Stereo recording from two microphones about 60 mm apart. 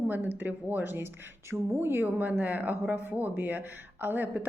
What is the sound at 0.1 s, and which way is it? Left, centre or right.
A woman's voice, right.